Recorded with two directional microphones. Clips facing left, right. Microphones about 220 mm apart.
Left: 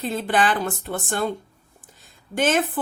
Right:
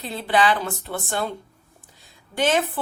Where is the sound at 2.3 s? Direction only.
50° left (ahead or behind).